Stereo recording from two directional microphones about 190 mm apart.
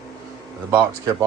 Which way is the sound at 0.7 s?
10° right (ahead or behind).